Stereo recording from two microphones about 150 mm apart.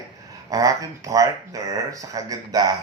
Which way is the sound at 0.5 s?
25° right (ahead or behind).